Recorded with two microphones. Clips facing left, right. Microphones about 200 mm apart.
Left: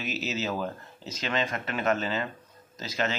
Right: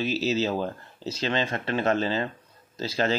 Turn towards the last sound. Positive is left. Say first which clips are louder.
# right 4 dB
turn(degrees=-30)  # may be behind; listen again after turning